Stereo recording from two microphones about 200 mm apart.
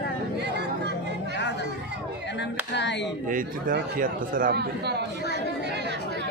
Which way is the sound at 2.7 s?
60° left (ahead or behind).